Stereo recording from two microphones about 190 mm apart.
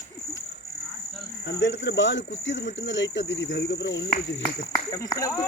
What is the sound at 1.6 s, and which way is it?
Speech, 70° left (ahead or behind).